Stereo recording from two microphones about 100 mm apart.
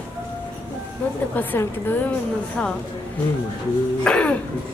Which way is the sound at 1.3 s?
20° left (ahead or behind).